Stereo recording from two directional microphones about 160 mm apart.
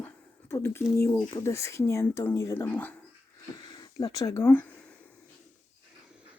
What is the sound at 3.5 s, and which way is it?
Speech, 25° left (ahead or behind).